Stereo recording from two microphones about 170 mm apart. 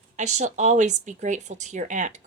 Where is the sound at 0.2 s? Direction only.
45° right (ahead or behind).